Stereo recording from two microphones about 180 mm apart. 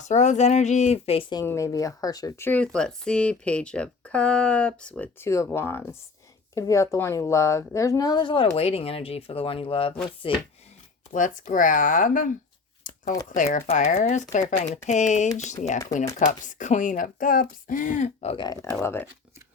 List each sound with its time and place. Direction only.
0.0 s a woman's voice: 40° left (ahead or behind)
11.1 s speech: 45° left (ahead or behind)
12.9 s a sound: 45° left (ahead or behind)
13.3 s speech: 45° left (ahead or behind)
18.4 s speech: 20° left (ahead or behind)